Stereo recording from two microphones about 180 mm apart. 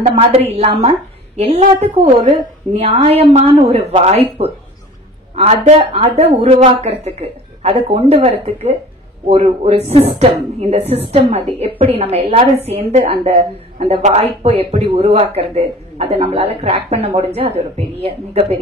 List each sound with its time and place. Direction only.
0.0 s a woman's voice: 35° right (ahead or behind)